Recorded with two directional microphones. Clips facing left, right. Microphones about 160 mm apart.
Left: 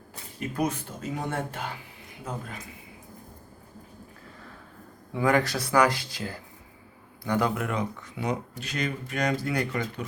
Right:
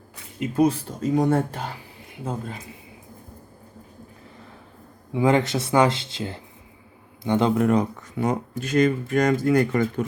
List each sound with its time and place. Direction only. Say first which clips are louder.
0.3 s speech: right 8 dB; 25° right (ahead or behind)
5.1 s speech: right 4 dB; 20° right (ahead or behind); by 10.1 s 45° right (ahead or behind)